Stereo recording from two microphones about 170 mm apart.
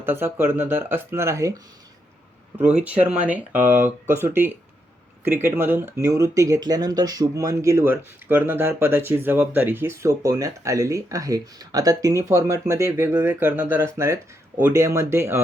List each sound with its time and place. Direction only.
0.0 s speech: 15° right (ahead or behind)
2.6 s speech: 10° right (ahead or behind)